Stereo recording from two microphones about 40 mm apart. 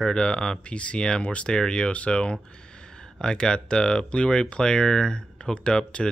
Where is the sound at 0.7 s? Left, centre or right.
Left.